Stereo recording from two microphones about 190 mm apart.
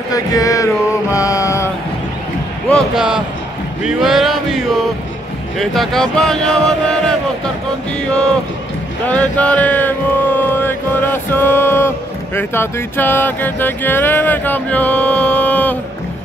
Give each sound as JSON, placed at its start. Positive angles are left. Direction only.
{"t": 0.1, "sound": "music", "side_deg": 20}
{"t": 1.1, "sound": "mantra", "side_deg": 15}
{"t": 2.7, "sound": "speech", "side_deg": -5}
{"t": 3.8, "sound": "music", "side_deg": 0}
{"t": 5.6, "sound": "speech", "side_deg": 0}
{"t": 9.0, "sound": "mantra", "side_deg": 5}
{"t": 12.4, "sound": "music", "side_deg": 10}